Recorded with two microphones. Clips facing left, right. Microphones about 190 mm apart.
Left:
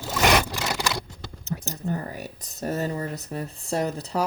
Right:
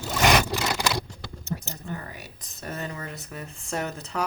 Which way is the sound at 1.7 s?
40° left (ahead or behind).